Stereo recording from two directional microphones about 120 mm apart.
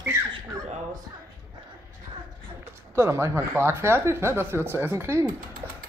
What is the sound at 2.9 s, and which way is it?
Speech, 20° right (ahead or behind).